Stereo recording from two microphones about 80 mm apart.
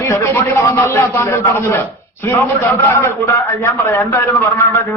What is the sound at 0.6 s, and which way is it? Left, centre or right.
A man's voice, left.